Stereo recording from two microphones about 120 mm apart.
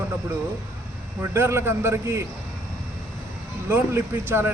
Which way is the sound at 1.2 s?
20° right (ahead or behind).